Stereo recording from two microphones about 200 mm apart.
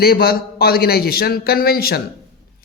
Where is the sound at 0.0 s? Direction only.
50° left (ahead or behind).